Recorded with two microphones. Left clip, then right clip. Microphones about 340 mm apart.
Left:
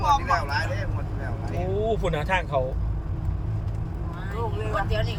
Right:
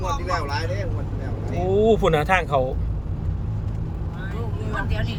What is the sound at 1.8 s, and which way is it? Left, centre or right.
Speech, centre.